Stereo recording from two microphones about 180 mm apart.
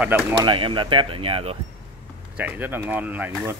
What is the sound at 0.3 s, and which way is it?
Speech, 30° right (ahead or behind).